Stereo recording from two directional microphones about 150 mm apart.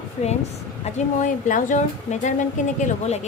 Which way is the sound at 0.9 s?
55° left (ahead or behind).